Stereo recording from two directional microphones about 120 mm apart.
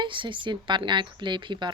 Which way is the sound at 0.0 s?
45° right (ahead or behind).